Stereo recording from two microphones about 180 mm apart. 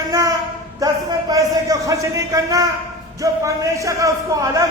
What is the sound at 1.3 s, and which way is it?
A man's voice, 20° right (ahead or behind).